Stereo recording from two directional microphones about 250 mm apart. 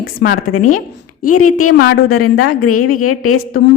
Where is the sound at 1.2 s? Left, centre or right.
Left.